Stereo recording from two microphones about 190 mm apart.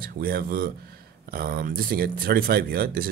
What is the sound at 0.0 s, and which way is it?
Speech, 50° right (ahead or behind).